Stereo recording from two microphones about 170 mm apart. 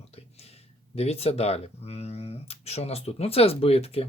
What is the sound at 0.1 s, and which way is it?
Speech, 40° left (ahead or behind).